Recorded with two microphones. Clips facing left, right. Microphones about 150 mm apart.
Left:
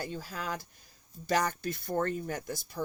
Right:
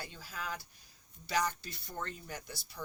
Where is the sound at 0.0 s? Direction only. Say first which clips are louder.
Left 7 dB; 50° left (ahead or behind).